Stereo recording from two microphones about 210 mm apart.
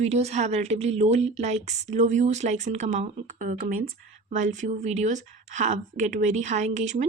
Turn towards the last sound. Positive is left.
turn(degrees=-35)  # may be behind; listen again after turning